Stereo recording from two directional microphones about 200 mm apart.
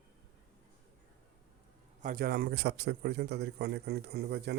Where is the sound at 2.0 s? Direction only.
45° right (ahead or behind).